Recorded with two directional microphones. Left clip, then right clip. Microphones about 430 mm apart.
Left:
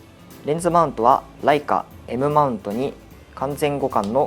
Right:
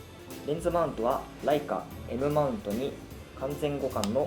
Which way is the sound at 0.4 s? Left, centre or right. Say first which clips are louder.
Left 10 dB; left.